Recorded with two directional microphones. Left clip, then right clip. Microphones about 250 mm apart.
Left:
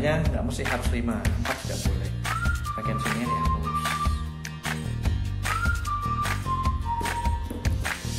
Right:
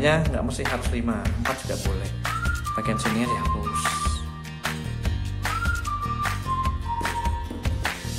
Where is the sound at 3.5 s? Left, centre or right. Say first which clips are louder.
Right 1 dB; centre.